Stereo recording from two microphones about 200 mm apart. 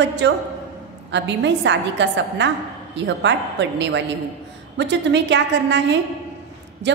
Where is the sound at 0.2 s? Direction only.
60° right (ahead or behind).